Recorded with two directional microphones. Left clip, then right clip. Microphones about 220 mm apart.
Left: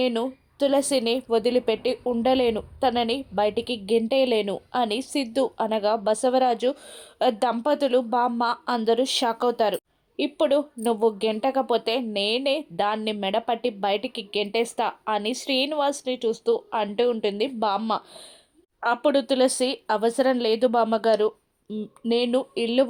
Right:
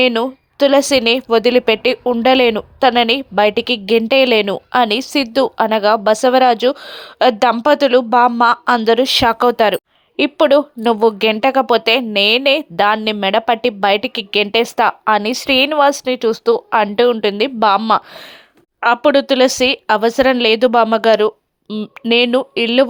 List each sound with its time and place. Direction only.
0.0 s a woman's voice: 20° right (ahead or behind)